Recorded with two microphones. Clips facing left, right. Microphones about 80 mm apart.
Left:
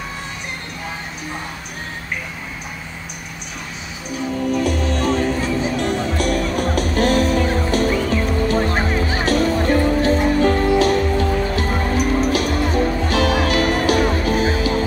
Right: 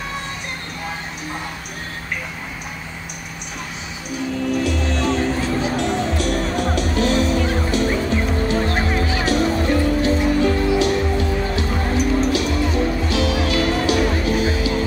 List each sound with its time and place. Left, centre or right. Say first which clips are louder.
4.4 s music: left 2 dB; left
7.9 s music: left 1 dB; right
8.6 s music: left 1 dB; left